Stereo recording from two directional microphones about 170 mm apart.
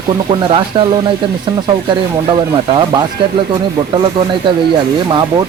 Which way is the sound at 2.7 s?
30° right (ahead or behind).